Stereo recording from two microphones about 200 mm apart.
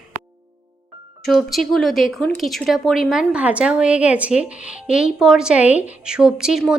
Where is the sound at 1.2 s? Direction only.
Centre (ahead or behind).